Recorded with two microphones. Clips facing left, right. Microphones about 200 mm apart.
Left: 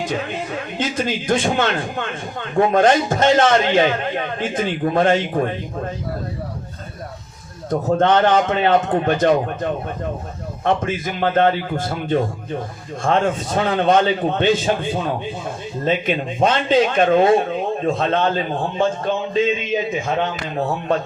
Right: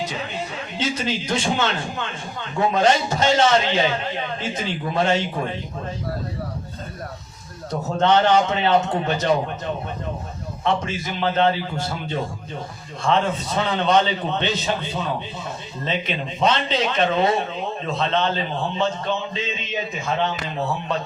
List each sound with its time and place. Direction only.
0.0 s a man's voice: 50° left (ahead or behind)
7.7 s a man's voice: 50° left (ahead or behind)